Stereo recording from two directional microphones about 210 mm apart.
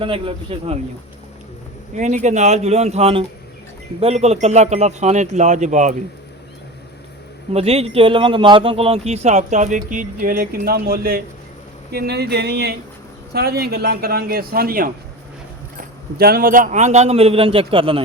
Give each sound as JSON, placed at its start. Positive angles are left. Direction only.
{"t": 0.0, "sound": "speech", "side_deg": -25}
{"t": 2.0, "sound": "speech", "side_deg": -35}
{"t": 7.5, "sound": "a man's voice", "side_deg": -30}
{"t": 16.1, "sound": "speech", "side_deg": -45}